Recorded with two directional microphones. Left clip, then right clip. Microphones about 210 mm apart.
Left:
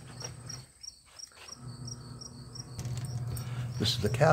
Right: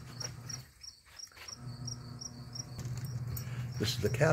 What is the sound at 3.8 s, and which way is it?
Cricket, centre (ahead or behind).